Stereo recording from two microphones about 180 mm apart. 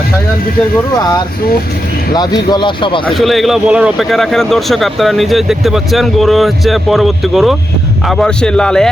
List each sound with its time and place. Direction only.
2.1 s speech: 25° left (ahead or behind)
3.1 s a man's voice: centre (ahead or behind)